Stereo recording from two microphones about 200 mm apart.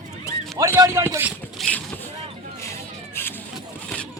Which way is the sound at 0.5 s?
15° right (ahead or behind).